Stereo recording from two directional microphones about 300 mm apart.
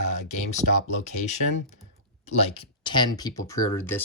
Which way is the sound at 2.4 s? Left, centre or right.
Centre.